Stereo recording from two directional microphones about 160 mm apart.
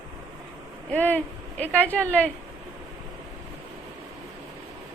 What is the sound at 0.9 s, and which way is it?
A woman's voice, 10° left (ahead or behind).